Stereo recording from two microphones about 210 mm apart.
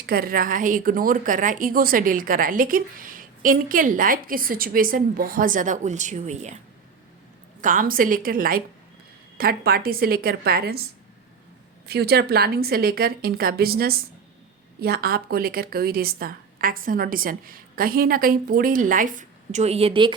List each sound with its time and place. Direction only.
0.0 s a woman's voice: 45° right (ahead or behind)
7.6 s a woman's voice: 40° right (ahead or behind)
11.9 s a woman's voice: 50° right (ahead or behind); by 20.1 s 25° right (ahead or behind)